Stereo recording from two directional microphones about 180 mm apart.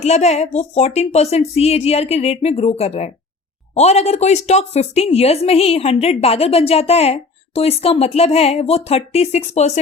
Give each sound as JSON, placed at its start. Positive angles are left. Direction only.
{"t": 0.0, "sound": "a woman's voice", "side_deg": 35}